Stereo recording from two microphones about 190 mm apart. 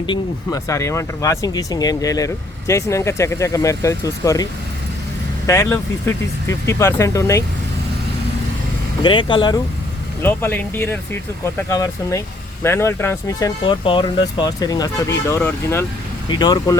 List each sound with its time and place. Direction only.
0.0 s speech: 20° left (ahead or behind)
5.5 s speech: 15° left (ahead or behind)
9.0 s speech: 25° left (ahead or behind)
10.2 s speech: 10° left (ahead or behind)